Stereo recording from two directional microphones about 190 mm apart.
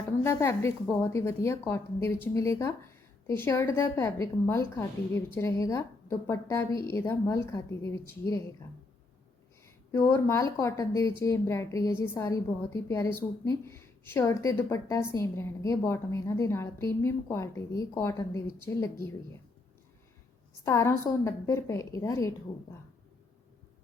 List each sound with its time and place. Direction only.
0.2 s speech: 15° left (ahead or behind)
9.9 s speech: 15° left (ahead or behind)
20.7 s speech: 15° left (ahead or behind)